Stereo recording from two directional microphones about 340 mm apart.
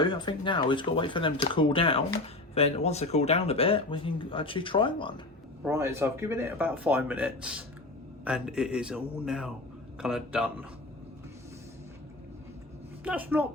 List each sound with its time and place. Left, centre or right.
0.0 s speech: centre
5.6 s speech: centre
13.1 s speech: centre